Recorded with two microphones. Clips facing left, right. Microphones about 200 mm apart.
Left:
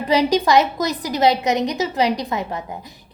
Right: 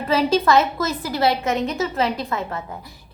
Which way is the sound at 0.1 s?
15° left (ahead or behind).